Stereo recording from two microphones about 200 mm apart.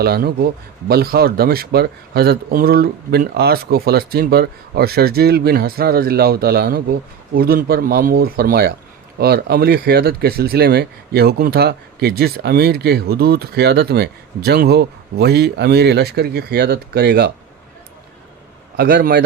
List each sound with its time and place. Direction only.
0.0 s speech: 50° right (ahead or behind)
18.8 s speech: 50° right (ahead or behind)